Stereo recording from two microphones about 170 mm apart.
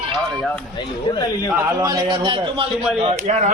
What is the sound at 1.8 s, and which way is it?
A man's voice, 20° right (ahead or behind).